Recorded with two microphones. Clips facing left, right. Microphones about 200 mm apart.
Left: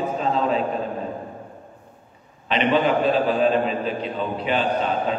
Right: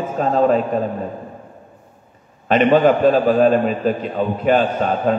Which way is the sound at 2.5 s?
45° right (ahead or behind).